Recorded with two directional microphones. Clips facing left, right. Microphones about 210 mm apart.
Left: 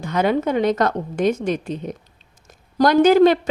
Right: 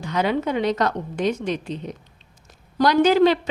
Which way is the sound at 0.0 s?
50° left (ahead or behind).